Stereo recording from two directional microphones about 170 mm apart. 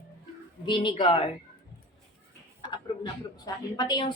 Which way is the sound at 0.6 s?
30° left (ahead or behind).